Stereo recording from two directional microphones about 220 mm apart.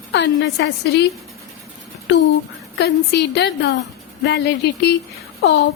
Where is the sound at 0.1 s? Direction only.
50° left (ahead or behind).